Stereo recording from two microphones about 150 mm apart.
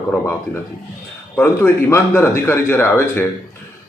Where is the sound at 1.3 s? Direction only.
15° left (ahead or behind).